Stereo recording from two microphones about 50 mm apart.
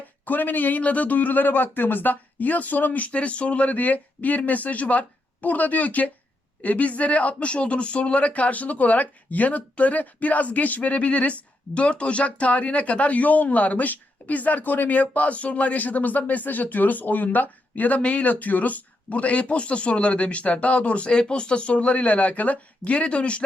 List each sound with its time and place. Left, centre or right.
0.3 s a man's voice: left